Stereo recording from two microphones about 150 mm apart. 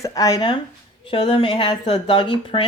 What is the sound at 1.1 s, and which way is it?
Speech, 35° left (ahead or behind).